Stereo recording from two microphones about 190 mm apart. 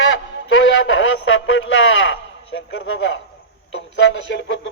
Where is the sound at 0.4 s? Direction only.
90° left.